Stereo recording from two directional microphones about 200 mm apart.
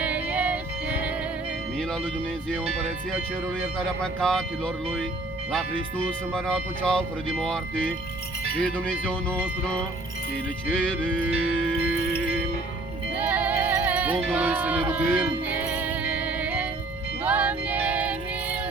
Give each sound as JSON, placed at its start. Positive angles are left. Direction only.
{"t": 0.0, "sound": "music", "side_deg": -5}
{"t": 3.8, "sound": "speech", "side_deg": 5}
{"t": 13.1, "sound": "music", "side_deg": -10}